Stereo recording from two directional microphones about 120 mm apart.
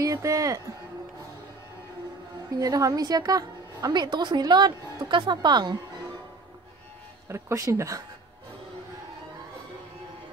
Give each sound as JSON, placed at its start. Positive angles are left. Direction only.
{"t": 0.0, "sound": "speech", "side_deg": -30}
{"t": 2.6, "sound": "a woman's voice", "side_deg": -30}
{"t": 7.2, "sound": "speech", "side_deg": -25}